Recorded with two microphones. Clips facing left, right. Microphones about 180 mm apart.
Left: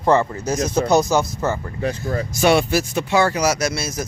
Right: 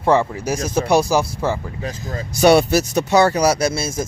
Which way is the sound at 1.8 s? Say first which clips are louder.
Left 6 dB; 65° left (ahead or behind).